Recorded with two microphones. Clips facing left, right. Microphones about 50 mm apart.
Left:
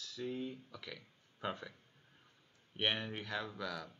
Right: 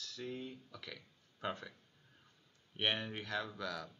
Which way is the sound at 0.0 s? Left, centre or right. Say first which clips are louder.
Left 3 dB; centre.